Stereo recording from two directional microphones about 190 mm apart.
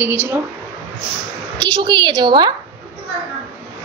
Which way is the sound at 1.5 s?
25° right (ahead or behind).